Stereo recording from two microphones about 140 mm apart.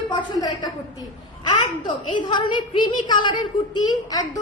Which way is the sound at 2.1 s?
35° left (ahead or behind).